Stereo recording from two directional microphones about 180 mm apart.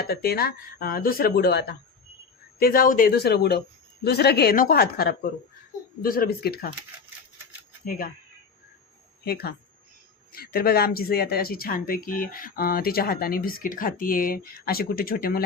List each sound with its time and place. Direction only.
0.0 s speech: 60° left (ahead or behind)
7.9 s speech: 55° left (ahead or behind)
9.2 s speech: 60° left (ahead or behind)